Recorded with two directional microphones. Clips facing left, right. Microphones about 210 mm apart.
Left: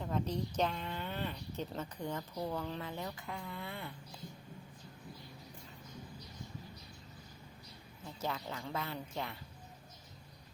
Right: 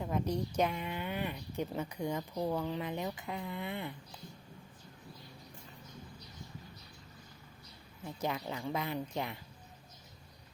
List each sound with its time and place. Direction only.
0.0 s speech: 10° right (ahead or behind)
8.0 s speech: 15° right (ahead or behind)